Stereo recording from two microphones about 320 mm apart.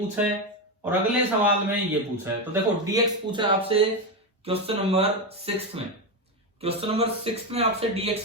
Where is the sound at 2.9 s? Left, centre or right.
Centre.